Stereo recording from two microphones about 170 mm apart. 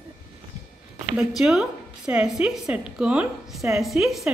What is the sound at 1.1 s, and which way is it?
A woman's voice, 5° right (ahead or behind).